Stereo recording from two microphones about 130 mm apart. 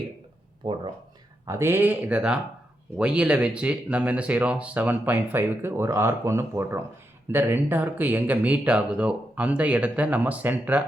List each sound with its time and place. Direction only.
0.6 s speech: 35° right (ahead or behind)
1.5 s speech: 20° right (ahead or behind)